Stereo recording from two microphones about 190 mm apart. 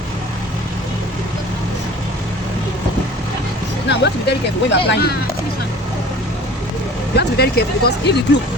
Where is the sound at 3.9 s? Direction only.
65° left (ahead or behind).